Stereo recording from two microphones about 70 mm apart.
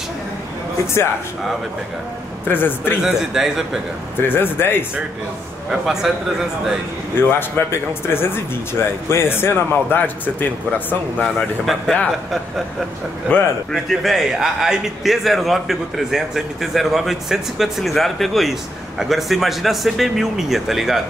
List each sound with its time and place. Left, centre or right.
2.4 s speech: left
3.0 s a man's voice: centre
4.2 s speech: left
5.7 s a man's voice: centre
7.2 s speech: left
11.6 s speech: centre
13.3 s speech: left
13.7 s speech: centre